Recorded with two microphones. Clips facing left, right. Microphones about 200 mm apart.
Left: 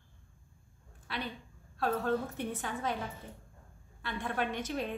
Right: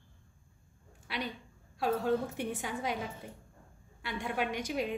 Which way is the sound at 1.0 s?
15° right (ahead or behind).